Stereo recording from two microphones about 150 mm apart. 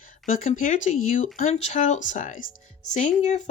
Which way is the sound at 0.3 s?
60° left (ahead or behind).